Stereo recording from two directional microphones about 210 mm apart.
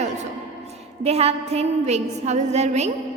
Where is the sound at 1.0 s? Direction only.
30° right (ahead or behind).